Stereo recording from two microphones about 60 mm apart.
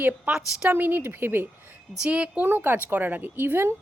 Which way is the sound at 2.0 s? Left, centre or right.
Centre.